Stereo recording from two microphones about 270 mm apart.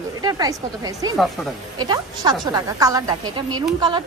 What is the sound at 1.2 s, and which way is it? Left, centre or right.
Speech, centre.